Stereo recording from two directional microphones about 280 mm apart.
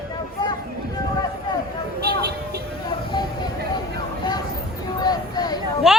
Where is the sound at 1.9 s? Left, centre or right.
Right.